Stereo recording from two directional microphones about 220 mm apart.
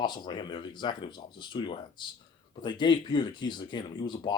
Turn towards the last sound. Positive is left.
turn(degrees=20)  # may be behind; listen again after turning